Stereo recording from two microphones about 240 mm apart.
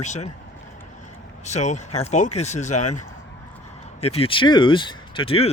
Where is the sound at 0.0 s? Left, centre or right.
Left.